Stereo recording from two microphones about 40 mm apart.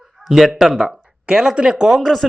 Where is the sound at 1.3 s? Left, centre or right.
Right.